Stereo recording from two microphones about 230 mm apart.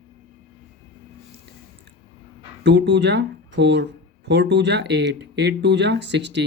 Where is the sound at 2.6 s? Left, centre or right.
Right.